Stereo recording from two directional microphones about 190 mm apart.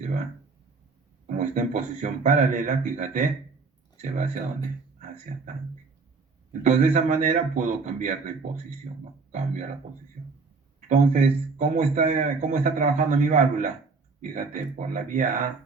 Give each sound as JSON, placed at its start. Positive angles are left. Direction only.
{"t": 0.0, "sound": "speech", "side_deg": -40}
{"t": 1.3, "sound": "a man's voice", "side_deg": -40}
{"t": 5.3, "sound": "speech", "side_deg": -45}
{"t": 6.5, "sound": "a man's voice", "side_deg": -40}
{"t": 10.8, "sound": "a man's voice", "side_deg": -40}